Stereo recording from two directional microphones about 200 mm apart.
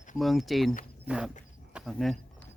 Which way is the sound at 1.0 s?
5° right (ahead or behind).